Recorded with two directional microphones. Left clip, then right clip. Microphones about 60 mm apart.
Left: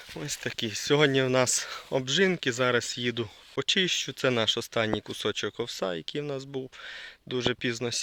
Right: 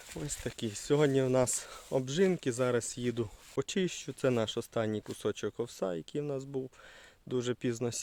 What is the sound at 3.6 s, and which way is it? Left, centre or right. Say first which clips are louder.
Speech: left 9 dB; right.